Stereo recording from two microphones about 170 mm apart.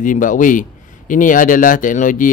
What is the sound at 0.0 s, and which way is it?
Speech, 50° left (ahead or behind).